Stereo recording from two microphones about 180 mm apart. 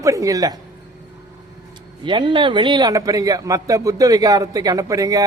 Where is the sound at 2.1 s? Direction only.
25° right (ahead or behind).